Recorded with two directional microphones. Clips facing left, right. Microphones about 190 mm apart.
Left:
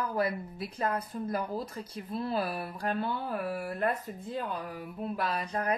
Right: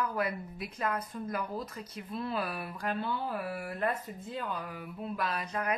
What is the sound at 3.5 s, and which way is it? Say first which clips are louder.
Speech: left 3 dB; 40° left (ahead or behind).